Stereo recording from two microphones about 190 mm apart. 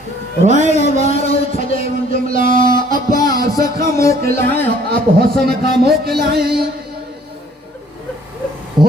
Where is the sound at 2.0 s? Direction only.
45° right (ahead or behind).